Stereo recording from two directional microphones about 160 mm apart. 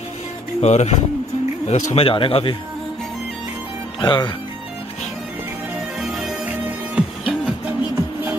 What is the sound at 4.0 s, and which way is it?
Speech, 30° left (ahead or behind).